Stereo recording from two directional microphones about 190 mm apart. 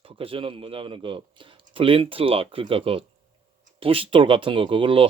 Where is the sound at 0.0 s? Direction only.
30° right (ahead or behind).